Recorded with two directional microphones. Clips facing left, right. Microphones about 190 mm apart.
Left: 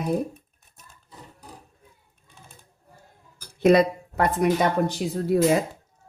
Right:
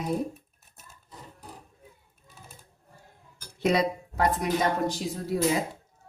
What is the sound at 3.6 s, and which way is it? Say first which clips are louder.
Speech: left 7 dB; 55° left (ahead or behind).